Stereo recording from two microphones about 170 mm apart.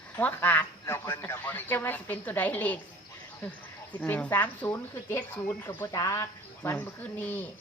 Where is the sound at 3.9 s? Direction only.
10° left (ahead or behind).